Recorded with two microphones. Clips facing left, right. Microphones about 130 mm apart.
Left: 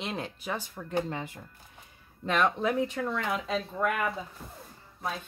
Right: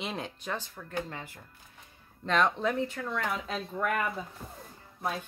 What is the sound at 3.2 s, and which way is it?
Speech, 5° left (ahead or behind).